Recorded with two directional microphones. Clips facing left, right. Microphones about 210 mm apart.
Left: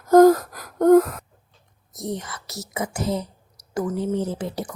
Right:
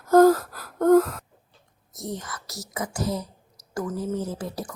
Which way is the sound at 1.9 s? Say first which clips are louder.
Left 4 dB; 20° left (ahead or behind).